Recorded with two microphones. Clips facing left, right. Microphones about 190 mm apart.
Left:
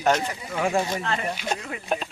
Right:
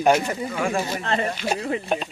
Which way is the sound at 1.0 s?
30° right (ahead or behind).